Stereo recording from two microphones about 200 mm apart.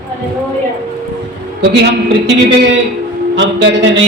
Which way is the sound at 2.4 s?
65° right (ahead or behind).